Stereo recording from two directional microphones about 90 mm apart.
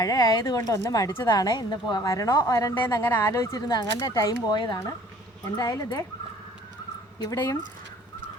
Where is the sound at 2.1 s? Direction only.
40° left (ahead or behind).